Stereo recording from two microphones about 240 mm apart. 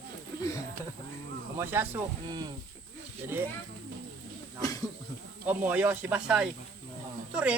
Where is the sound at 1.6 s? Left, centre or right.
Centre.